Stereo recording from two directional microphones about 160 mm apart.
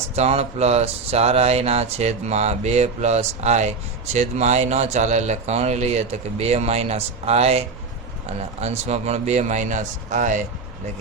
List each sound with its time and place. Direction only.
0.2 s speech: 40° right (ahead or behind)